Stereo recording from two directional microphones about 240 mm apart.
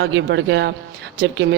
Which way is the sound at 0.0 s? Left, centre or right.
Right.